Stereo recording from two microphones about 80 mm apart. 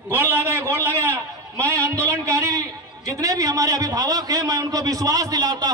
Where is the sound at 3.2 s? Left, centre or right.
Right.